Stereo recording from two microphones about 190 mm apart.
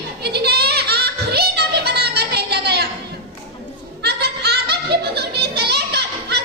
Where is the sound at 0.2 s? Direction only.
60° right (ahead or behind).